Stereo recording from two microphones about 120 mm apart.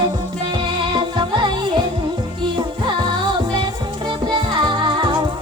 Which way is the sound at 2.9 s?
40° right (ahead or behind).